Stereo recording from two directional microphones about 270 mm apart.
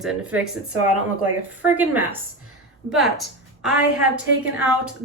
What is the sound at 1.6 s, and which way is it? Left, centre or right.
A woman's voice, centre.